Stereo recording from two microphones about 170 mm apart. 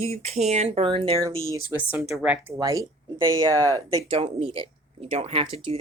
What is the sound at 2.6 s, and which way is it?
Speech, 20° right (ahead or behind).